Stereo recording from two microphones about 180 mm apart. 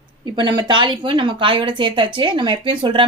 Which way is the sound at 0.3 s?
25° right (ahead or behind).